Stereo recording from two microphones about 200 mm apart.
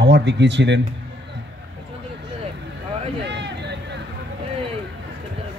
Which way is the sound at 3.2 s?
60° right (ahead or behind).